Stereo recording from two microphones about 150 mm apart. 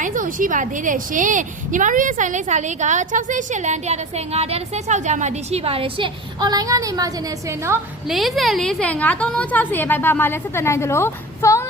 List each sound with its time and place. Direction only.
0.0 s a woman's voice: 65° right (ahead or behind); by 7.8 s 20° right (ahead or behind)
8.0 s a woman's voice: centre (ahead or behind); by 11.7 s 20° left (ahead or behind)